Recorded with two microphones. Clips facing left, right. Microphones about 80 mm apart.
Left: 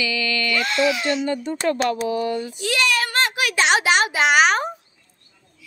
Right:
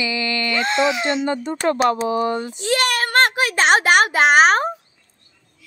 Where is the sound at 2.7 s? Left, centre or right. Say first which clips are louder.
Right 4 dB; right.